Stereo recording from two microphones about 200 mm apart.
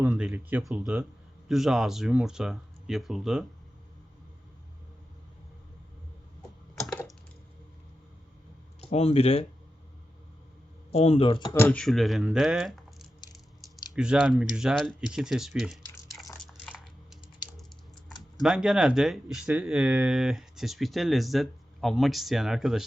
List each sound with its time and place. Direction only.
0.0 s speech: 5° right (ahead or behind)
6.7 s typing: centre (ahead or behind)
8.9 s speech: 30° left (ahead or behind)
10.9 s speech: 30° left (ahead or behind)
11.5 s speech: 10° left (ahead or behind)
16.4 s a sound: centre (ahead or behind)
18.4 s speech: 5° right (ahead or behind)